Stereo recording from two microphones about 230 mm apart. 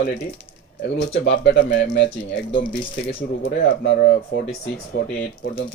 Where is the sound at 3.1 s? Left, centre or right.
Left.